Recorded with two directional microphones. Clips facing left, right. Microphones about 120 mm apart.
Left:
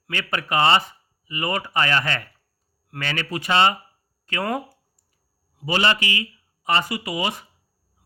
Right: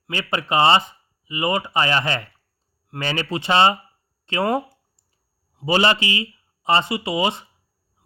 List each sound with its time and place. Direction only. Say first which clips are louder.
0.1 s speech: right 2 dB; 25° right (ahead or behind)
4.3 s a sound: right 5 dB; 25° right (ahead or behind)
5.5 s speech: right 3 dB; 25° right (ahead or behind)